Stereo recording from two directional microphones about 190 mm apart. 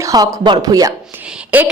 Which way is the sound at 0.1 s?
20° right (ahead or behind).